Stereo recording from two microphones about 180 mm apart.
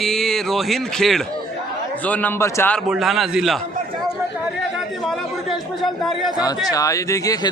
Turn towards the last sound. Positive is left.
turn(degrees=20)  # may be behind; listen again after turning